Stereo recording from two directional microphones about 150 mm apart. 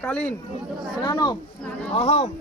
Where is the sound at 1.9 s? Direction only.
45° left (ahead or behind).